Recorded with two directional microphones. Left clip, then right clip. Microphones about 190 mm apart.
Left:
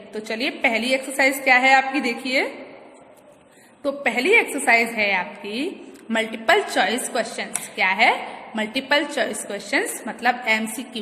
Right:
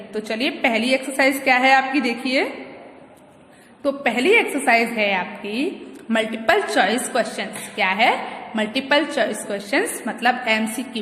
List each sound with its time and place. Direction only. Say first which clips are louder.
0.1 s a woman's voice: right 2 dB; 15° left (ahead or behind)
3.8 s a woman's voice: right 2 dB; 15° left (ahead or behind)